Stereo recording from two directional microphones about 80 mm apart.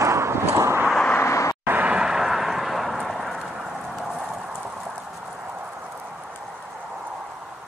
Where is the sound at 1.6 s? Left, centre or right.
Right; by 4.6 s centre.